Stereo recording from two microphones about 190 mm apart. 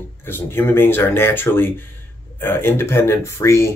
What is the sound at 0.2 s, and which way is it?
Speech, 10° left (ahead or behind).